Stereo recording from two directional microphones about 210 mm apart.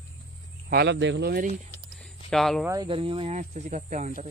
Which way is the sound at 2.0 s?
Centre (ahead or behind).